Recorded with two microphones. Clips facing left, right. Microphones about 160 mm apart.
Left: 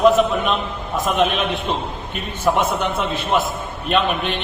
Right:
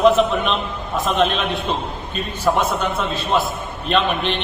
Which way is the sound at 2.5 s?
15° left (ahead or behind).